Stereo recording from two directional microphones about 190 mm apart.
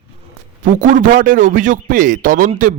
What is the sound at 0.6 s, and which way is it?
A man's voice, 40° right (ahead or behind).